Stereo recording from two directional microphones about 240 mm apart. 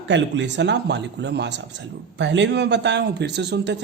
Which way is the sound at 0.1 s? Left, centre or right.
Right.